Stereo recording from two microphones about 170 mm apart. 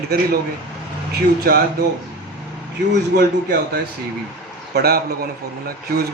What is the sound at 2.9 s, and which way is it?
Speech, 75° right (ahead or behind).